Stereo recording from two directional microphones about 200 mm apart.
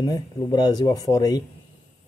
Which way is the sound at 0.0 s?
20° left (ahead or behind).